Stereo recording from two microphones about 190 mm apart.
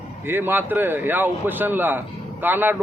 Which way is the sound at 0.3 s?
10° right (ahead or behind).